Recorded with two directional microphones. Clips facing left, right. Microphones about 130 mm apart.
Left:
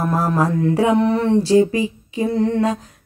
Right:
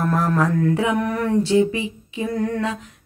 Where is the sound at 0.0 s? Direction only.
25° left (ahead or behind).